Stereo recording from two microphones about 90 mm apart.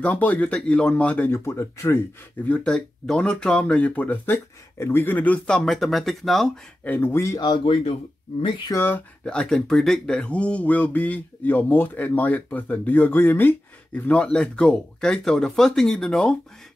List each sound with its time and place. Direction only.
0.0 s speech: 15° left (ahead or behind)
1.3 s speech: 30° left (ahead or behind)
2.4 s speech: 15° left (ahead or behind)
5.6 s speech: centre (ahead or behind)
6.8 s speech: 20° left (ahead or behind)
7.3 s speech: 55° left (ahead or behind)
7.6 s speech: 90° left
8.7 s speech: 25° left (ahead or behind)
9.2 s speech: 10° left (ahead or behind)